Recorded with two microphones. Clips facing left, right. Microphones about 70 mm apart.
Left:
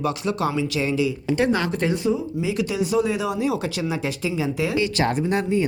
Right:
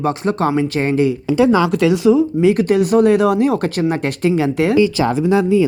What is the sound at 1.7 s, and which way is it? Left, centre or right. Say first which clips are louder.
Speech: right 9 dB; right.